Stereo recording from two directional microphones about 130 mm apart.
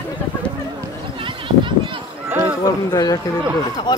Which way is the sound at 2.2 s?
20° right (ahead or behind).